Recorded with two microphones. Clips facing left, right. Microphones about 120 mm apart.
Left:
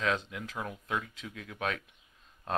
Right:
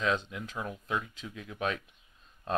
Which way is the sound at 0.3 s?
25° right (ahead or behind).